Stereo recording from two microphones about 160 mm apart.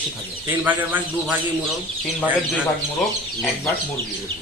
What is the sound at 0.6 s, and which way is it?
Speech, 10° right (ahead or behind).